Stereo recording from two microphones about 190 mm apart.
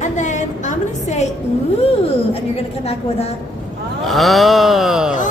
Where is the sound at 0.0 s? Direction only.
40° left (ahead or behind).